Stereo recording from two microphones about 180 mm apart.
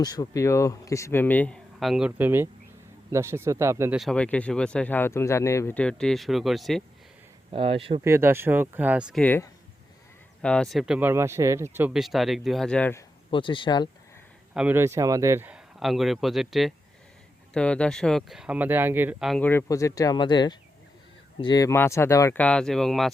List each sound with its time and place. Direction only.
0.0 s a man's voice: 20° left (ahead or behind); by 3.9 s 15° right (ahead or behind)
3.9 s speech: centre (ahead or behind)
7.5 s speech: 30° right (ahead or behind)
8.0 s speech: 15° right (ahead or behind)
9.2 s a man's voice: 10° left (ahead or behind); by 11.9 s 15° right (ahead or behind)
11.9 s a man's voice: centre (ahead or behind)
13.3 s speech: 25° left (ahead or behind)
14.5 s speech: 10° right (ahead or behind)
19.3 s a man's voice: 10° left (ahead or behind)